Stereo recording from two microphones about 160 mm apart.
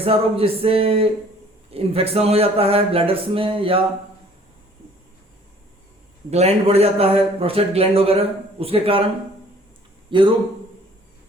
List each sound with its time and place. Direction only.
0.0 s a man's voice: 35° right (ahead or behind)
6.3 s a man's voice: 40° right (ahead or behind)
10.1 s a man's voice: 30° right (ahead or behind)